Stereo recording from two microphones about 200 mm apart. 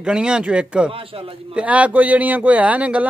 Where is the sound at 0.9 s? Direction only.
25° right (ahead or behind).